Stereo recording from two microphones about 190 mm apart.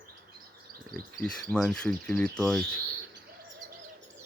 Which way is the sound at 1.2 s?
5° left (ahead or behind).